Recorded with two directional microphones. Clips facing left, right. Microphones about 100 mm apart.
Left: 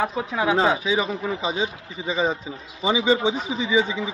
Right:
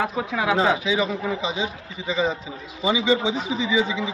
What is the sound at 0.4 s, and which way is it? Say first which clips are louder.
Speech: left 1 dB; 25° left (ahead or behind).